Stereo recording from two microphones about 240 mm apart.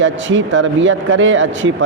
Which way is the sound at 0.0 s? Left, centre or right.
Right.